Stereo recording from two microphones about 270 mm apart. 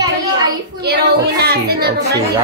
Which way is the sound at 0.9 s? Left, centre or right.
Right.